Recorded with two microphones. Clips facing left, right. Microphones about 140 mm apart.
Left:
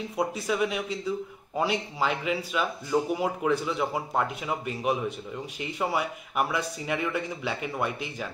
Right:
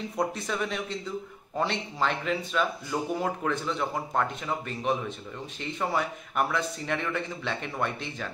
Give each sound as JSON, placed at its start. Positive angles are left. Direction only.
{"t": 0.2, "sound": "speech", "side_deg": 5}